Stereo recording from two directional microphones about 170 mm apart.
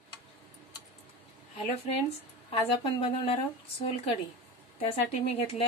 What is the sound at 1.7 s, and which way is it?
Speech, 35° left (ahead or behind).